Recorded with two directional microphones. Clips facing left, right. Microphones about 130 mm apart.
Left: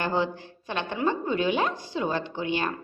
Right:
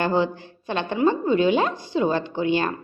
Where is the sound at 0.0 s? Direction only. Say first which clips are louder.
Right 5 dB; 25° right (ahead or behind).